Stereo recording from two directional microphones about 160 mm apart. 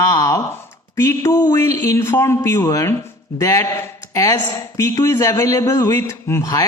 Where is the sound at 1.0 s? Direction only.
15° left (ahead or behind).